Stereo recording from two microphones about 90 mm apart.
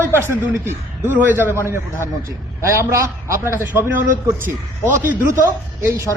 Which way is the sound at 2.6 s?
30° right (ahead or behind).